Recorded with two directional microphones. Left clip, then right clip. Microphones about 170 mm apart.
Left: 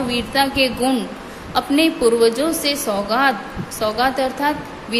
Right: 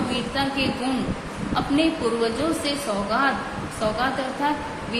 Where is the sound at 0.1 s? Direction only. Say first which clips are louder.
Left 6 dB; 65° left (ahead or behind).